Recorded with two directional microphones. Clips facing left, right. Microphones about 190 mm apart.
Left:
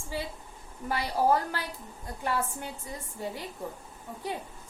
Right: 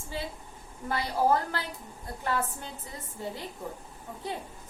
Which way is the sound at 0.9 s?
15° left (ahead or behind).